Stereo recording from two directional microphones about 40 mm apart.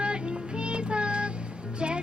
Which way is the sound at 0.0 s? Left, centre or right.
Right.